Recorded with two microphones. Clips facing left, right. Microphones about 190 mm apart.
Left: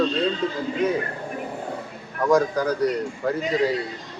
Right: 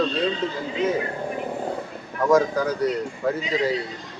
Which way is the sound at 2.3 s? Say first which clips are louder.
Even; centre (ahead or behind).